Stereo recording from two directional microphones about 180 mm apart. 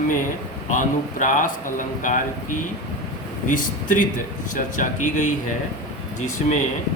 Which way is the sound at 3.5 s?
45° left (ahead or behind).